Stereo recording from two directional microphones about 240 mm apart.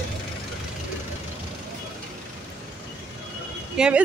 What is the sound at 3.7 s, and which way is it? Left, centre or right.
Speech, centre.